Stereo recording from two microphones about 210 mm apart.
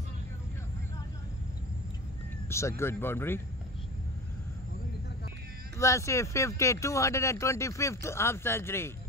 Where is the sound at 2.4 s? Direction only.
15° left (ahead or behind).